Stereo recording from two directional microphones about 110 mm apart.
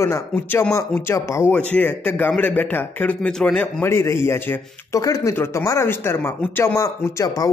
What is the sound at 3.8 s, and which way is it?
Speech, 25° left (ahead or behind).